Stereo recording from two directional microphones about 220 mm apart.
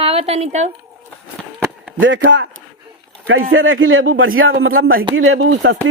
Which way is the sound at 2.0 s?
60° right (ahead or behind).